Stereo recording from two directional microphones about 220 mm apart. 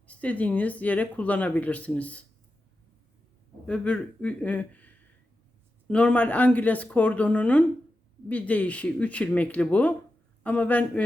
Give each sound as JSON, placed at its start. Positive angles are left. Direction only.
{"t": 0.1, "sound": "speech", "side_deg": 5}
{"t": 3.7, "sound": "speech", "side_deg": 5}